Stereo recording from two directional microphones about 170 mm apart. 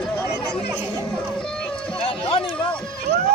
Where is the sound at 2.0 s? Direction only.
30° left (ahead or behind).